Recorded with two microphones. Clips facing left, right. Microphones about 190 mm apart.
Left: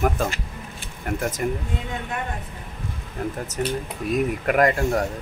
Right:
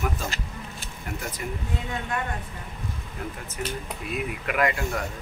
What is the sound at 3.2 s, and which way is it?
Speech, 45° left (ahead or behind).